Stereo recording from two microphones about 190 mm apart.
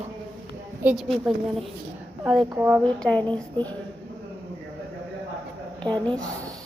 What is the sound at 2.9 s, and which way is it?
Speech, 5° left (ahead or behind).